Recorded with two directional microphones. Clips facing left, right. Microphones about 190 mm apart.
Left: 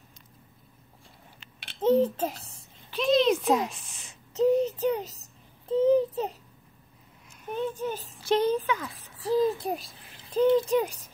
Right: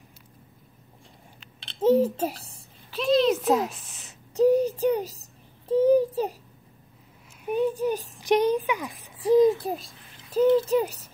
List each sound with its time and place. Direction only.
1.8 s a child's voice: 10° right (ahead or behind)
2.9 s a sound: 5° right (ahead or behind)
5.7 s child singing: 10° right (ahead or behind)
7.4 s a sound: 10° right (ahead or behind)
7.8 s a child's voice: 15° right (ahead or behind)
9.7 s a child's voice: centre (ahead or behind)